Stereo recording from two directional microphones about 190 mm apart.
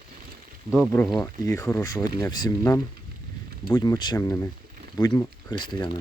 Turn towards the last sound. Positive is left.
turn(degrees=25)  # may be behind; listen again after turning